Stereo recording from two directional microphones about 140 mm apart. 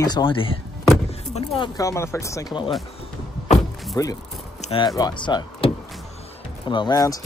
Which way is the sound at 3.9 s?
25° left (ahead or behind).